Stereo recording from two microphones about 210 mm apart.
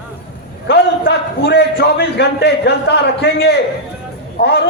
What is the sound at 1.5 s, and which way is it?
A man's voice, 50° left (ahead or behind).